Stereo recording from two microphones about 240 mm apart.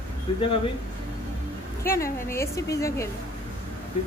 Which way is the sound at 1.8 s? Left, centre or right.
Centre.